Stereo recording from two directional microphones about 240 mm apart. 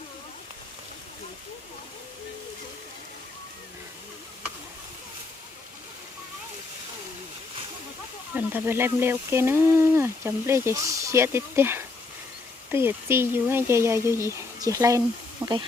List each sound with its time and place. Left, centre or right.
8.4 s speech: centre